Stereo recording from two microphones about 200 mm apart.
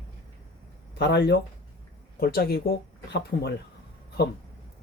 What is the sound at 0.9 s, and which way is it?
Speech, 60° left (ahead or behind).